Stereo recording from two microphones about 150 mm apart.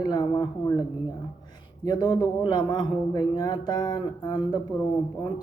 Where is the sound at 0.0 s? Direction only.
25° left (ahead or behind).